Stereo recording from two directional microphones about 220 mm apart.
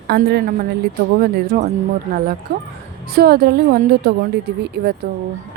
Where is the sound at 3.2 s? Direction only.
45° right (ahead or behind).